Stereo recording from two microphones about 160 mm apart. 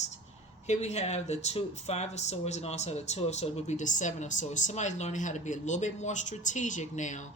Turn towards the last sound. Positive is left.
turn(degrees=50)  # may be behind; listen again after turning